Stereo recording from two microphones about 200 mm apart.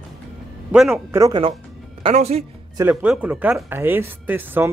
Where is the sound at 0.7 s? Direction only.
5° right (ahead or behind).